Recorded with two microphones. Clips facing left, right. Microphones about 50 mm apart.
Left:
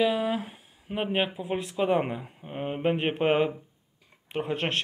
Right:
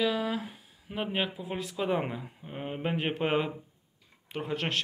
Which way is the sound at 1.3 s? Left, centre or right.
Centre.